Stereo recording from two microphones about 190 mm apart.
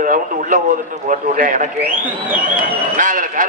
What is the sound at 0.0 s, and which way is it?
A man's voice, 45° right (ahead or behind).